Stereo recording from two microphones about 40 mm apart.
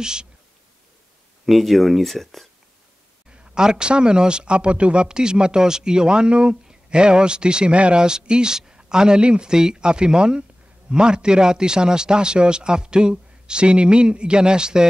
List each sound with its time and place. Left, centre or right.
0.0 s speech: centre
1.4 s speech: centre
3.3 s speech: right